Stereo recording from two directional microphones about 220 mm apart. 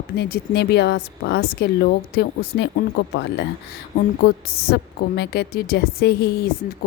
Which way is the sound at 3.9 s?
40° left (ahead or behind).